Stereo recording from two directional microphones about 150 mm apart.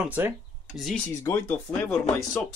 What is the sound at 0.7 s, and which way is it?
Speech, centre (ahead or behind).